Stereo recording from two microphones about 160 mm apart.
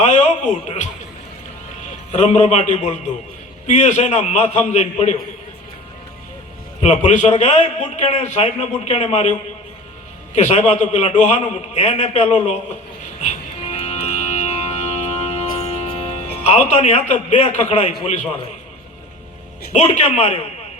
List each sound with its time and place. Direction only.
0.0 s music: 45° left (ahead or behind)
2.1 s a man's voice: 45° left (ahead or behind)
6.8 s a man's voice: 45° left (ahead or behind)
10.3 s a man's voice: 45° left (ahead or behind)
13.2 s music: 45° left (ahead or behind)
18.0 s a man's voice: 45° left (ahead or behind)
19.7 s a man's voice: 45° left (ahead or behind)